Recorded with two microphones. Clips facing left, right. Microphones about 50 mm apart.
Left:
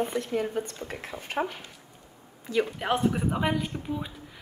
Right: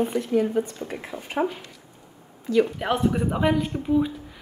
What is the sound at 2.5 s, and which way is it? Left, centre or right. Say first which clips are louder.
Speech: right 6 dB; left.